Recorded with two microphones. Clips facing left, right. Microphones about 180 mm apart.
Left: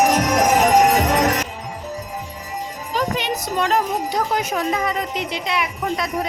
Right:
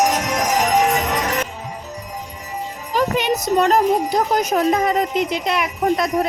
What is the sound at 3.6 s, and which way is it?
Speech, 40° right (ahead or behind).